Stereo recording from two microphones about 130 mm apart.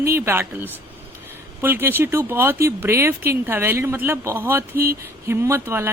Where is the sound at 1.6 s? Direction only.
15° right (ahead or behind).